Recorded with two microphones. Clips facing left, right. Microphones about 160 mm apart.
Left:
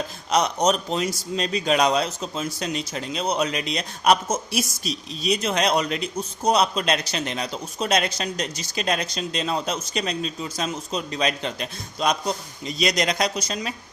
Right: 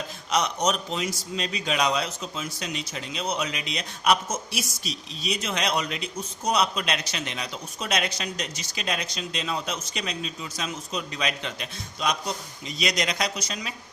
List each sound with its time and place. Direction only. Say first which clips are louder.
0.3 s a man's voice: left 4 dB; 35° left (ahead or behind)